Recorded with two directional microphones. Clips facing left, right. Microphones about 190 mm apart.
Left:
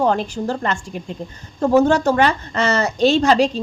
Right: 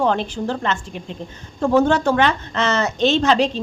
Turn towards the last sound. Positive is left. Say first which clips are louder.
# left 2 dB
turn(degrees=5)  # may be behind; listen again after turning